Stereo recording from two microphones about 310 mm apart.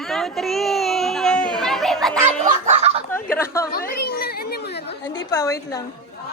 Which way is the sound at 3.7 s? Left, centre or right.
Left.